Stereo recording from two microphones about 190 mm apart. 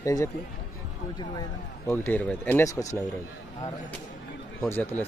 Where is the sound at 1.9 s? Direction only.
10° left (ahead or behind).